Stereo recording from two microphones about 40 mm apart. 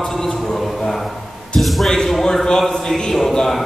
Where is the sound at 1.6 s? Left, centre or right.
Centre.